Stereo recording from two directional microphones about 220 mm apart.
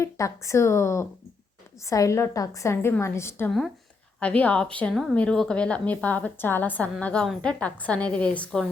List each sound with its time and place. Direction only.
0.0 s a woman's voice: 15° left (ahead or behind)